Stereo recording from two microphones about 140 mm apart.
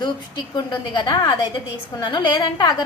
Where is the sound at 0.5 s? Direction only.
30° left (ahead or behind).